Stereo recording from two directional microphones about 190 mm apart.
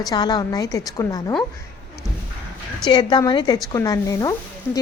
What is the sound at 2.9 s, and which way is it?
A woman's voice, 25° left (ahead or behind).